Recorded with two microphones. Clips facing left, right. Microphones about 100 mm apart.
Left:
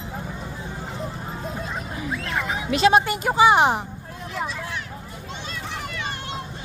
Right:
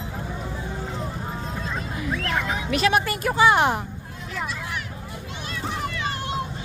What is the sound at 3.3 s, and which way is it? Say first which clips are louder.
Speech: left 2 dB; 15° left (ahead or behind).